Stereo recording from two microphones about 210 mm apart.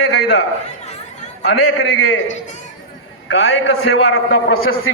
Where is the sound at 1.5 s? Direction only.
75° left (ahead or behind).